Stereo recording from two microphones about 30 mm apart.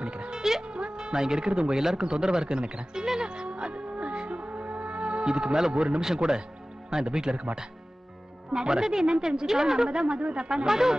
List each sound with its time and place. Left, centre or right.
0.0 s music: right
0.4 s music: centre
0.7 s speech: right
1.8 s speech: centre
2.0 s music: right
5.2 s speech: right
8.5 s speech: right
9.9 s speech: right